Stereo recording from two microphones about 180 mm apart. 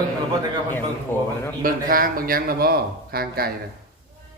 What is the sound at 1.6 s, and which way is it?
A man's voice, 50° right (ahead or behind).